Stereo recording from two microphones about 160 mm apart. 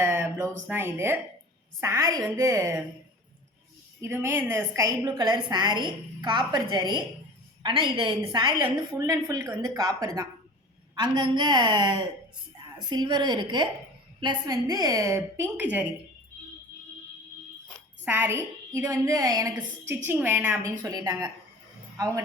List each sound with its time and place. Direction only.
0.0 s a sound: 15° right (ahead or behind)
0.7 s a woman's voice: 15° right (ahead or behind)
4.0 s a woman's voice: 15° right (ahead or behind)
18.0 s a woman's voice: 10° right (ahead or behind)